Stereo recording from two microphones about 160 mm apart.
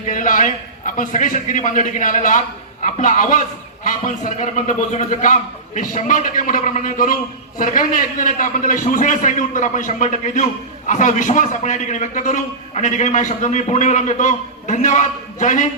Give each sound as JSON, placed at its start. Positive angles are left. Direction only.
{"t": 0.1, "sound": "a man's voice", "side_deg": 55}